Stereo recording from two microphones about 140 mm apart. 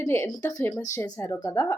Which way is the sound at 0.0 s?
20° left (ahead or behind).